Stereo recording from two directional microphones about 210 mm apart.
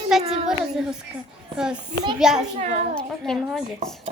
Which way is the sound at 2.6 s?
30° right (ahead or behind).